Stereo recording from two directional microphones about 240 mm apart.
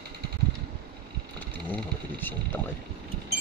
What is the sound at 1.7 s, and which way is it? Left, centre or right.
Speech, centre.